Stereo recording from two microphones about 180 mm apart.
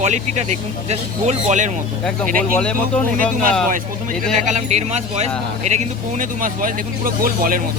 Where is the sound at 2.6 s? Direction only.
5° left (ahead or behind).